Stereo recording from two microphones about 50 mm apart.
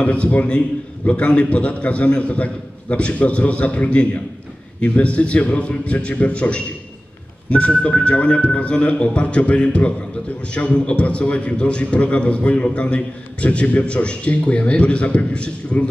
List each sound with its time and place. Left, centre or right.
0.0 s a man's voice: left